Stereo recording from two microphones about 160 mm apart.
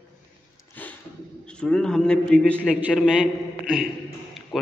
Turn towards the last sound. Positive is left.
turn(degrees=0)  # may be behind; listen again after turning